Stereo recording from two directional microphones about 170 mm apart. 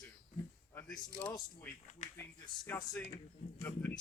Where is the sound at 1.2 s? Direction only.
10° left (ahead or behind).